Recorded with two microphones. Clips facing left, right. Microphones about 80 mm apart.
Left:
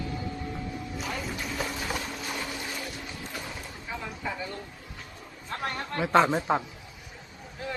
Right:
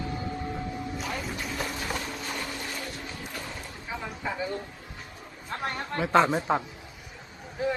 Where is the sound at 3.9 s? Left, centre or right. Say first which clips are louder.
Right 2 dB; centre.